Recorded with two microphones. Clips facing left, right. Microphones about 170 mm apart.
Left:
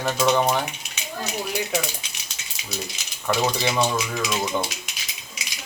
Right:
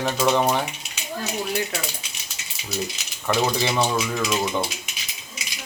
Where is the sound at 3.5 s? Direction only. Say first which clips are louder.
Right 1 dB; centre (ahead or behind).